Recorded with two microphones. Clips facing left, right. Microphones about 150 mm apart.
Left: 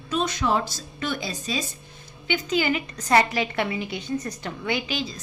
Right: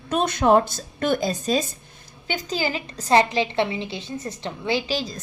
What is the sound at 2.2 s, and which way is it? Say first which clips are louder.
A woman's voice: left 2 dB; 35° right (ahead or behind).